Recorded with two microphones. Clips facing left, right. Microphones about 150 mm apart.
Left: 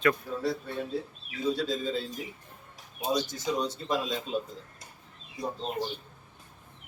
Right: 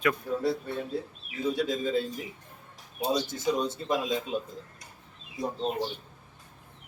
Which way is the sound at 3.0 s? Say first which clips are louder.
Right 2 dB; 25° right (ahead or behind).